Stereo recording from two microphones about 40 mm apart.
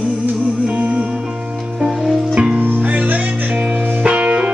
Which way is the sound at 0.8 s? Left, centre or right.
Right.